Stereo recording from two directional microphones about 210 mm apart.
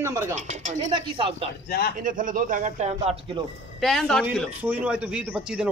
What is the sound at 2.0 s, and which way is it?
Speech, 40° right (ahead or behind).